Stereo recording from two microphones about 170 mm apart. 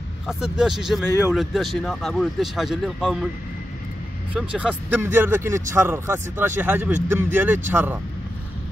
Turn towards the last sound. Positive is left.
turn(degrees=-10)  # may be behind; listen again after turning